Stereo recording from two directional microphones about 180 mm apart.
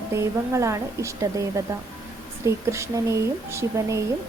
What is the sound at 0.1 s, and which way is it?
Speech, 15° right (ahead or behind).